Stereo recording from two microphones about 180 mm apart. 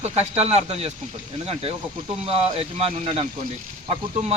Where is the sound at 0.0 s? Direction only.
35° right (ahead or behind).